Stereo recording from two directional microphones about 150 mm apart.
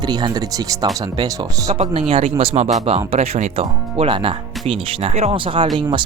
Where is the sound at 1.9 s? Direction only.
40° right (ahead or behind).